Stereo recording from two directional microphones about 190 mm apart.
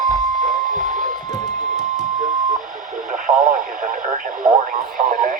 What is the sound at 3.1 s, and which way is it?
Radio, 45° right (ahead or behind).